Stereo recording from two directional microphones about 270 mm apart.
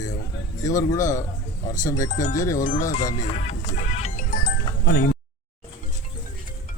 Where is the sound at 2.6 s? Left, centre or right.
Left.